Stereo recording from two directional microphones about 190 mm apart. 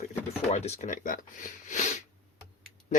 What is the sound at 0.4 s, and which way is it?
Speech, 35° left (ahead or behind).